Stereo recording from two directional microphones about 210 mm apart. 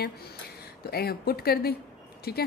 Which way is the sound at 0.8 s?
45° left (ahead or behind).